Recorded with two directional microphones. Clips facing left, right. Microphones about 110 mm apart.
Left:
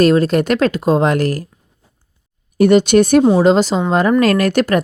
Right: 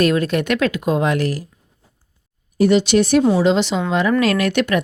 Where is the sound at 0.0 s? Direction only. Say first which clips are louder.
Left 5 dB; 35° left (ahead or behind).